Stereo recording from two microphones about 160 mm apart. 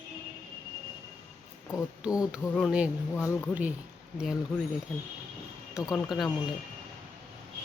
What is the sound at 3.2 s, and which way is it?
Speech, 15° left (ahead or behind).